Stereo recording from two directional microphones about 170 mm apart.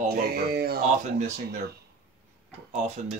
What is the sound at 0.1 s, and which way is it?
Speech, 65° right (ahead or behind).